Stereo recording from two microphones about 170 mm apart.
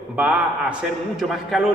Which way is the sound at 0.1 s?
10° right (ahead or behind).